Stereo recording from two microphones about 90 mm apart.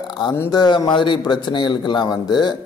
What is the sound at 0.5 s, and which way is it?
A man's voice, 50° left (ahead or behind).